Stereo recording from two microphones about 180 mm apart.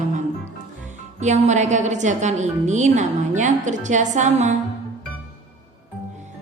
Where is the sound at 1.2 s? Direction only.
40° right (ahead or behind).